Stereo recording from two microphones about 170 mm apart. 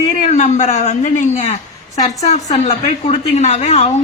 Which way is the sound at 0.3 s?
45° left (ahead or behind).